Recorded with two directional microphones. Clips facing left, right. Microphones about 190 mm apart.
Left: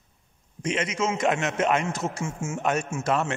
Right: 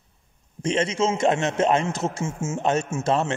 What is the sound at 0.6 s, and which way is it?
A man's voice, 30° right (ahead or behind).